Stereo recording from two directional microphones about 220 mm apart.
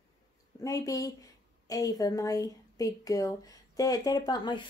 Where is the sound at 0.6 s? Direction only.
15° left (ahead or behind).